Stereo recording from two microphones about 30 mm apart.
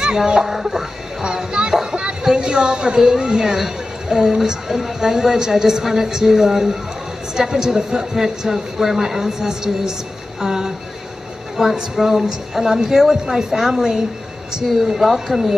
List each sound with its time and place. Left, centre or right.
0.0 s a woman's voice: right
1.2 s speech: right
1.7 s a sound: right
3.1 s speech: right
3.4 s a woman's voice: centre
15.0 s a woman's voice: centre